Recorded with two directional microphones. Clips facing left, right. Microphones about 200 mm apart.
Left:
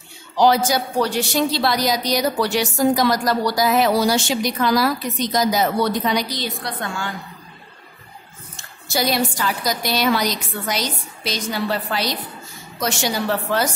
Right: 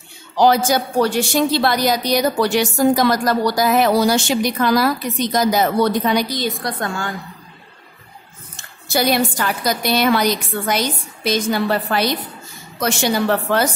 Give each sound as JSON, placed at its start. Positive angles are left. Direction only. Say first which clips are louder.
{"t": 0.4, "sound": "a woman's voice", "louder": "right 2 dB", "side_deg": -50}
{"t": 8.5, "sound": "a woman's voice", "louder": "right 3 dB", "side_deg": -55}